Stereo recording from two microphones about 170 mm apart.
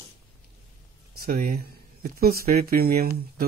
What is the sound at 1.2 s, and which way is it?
Speech, 60° right (ahead or behind).